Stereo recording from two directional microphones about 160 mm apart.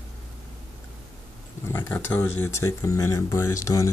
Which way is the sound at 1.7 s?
15° left (ahead or behind).